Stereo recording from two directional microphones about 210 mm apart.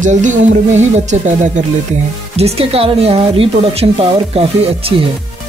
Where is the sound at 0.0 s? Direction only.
35° right (ahead or behind).